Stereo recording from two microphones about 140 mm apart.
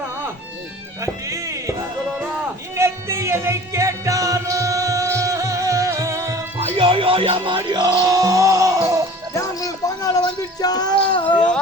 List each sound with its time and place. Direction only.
1.0 s music: 20° right (ahead or behind)
2.7 s music: 20° right (ahead or behind)
6.6 s music: 45° right (ahead or behind); by 9.0 s 25° right (ahead or behind)
9.3 s a sound: 25° left (ahead or behind)